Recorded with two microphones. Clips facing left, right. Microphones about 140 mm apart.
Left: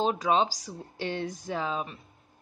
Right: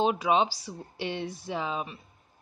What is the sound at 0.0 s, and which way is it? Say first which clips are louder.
Speech: right 1 dB; 5° right (ahead or behind).